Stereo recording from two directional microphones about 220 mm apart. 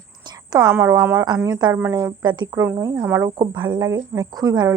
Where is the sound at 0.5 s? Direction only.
15° right (ahead or behind).